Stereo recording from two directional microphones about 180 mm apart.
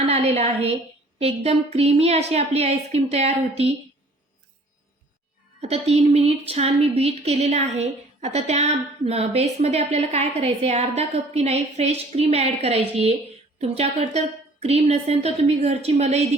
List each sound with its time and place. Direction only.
0.0 s a woman's voice: 35° right (ahead or behind)
5.5 s a woman's voice: 35° right (ahead or behind)